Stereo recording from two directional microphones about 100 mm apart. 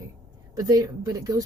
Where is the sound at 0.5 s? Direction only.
40° right (ahead or behind).